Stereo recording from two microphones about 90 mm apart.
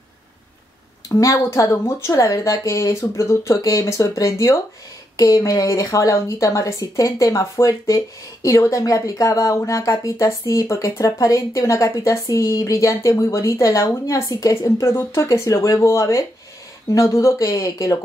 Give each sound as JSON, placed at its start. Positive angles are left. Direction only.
{"t": 1.0, "sound": "speech", "side_deg": 35}